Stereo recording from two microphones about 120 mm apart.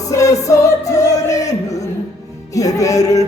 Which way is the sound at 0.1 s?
25° left (ahead or behind).